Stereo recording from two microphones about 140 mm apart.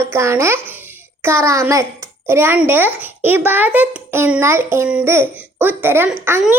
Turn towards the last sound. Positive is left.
turn(degrees=-10)  # may be behind; listen again after turning